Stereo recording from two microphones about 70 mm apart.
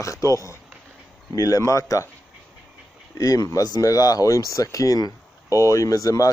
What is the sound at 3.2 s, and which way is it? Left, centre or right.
Speech, left.